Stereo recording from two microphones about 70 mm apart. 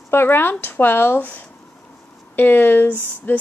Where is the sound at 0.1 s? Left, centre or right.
Left.